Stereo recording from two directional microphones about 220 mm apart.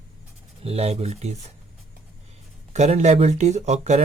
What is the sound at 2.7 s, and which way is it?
Speech, 30° right (ahead or behind).